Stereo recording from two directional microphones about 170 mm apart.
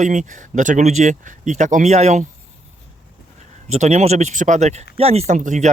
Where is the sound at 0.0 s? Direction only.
50° right (ahead or behind).